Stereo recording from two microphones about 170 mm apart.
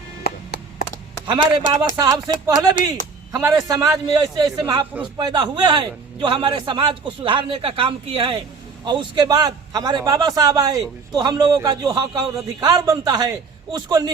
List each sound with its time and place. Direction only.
0.2 s music: 65° left (ahead or behind)
1.3 s a man's voice: 25° right (ahead or behind)